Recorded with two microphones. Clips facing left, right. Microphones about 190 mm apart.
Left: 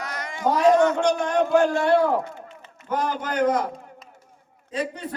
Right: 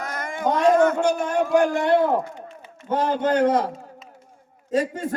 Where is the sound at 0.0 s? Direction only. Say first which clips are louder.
Right 3 dB; 50° right (ahead or behind).